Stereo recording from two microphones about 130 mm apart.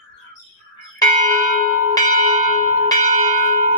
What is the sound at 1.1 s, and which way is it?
Bell, 75° right (ahead or behind).